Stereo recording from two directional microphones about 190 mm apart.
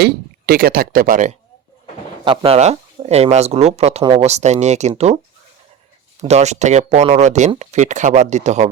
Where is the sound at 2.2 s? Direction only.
30° right (ahead or behind).